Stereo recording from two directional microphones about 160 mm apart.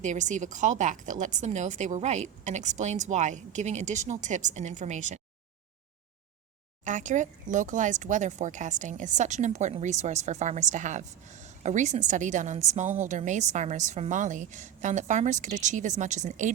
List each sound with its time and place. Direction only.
0.0 s speech: 50° right (ahead or behind)
6.8 s speech: 50° right (ahead or behind)